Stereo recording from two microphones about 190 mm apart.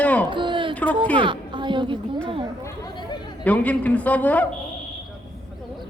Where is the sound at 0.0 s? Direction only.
5° left (ahead or behind).